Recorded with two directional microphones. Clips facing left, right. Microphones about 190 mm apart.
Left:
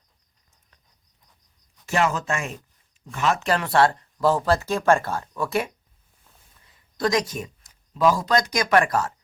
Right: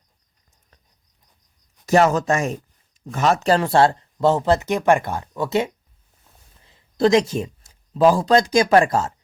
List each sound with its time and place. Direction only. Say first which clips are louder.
1.9 s a man's voice: right 7 dB; 40° right (ahead or behind)